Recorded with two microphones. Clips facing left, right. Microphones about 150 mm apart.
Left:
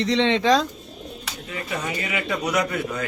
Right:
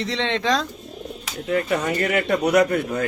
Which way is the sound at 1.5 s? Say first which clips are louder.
Right 8 dB; 55° right (ahead or behind).